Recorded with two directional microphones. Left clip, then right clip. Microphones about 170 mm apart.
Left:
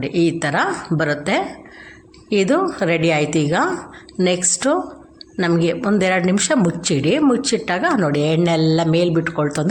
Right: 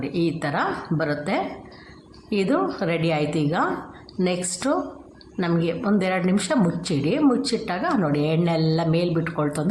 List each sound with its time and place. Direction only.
0.0 s a woman's voice: 20° left (ahead or behind)